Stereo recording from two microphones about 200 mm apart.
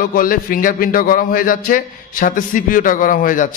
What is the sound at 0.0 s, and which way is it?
A man's voice, 45° left (ahead or behind).